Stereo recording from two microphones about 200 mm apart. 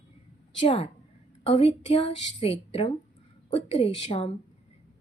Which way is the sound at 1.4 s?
30° left (ahead or behind).